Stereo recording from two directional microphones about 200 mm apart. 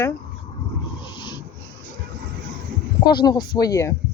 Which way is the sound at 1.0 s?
25° left (ahead or behind).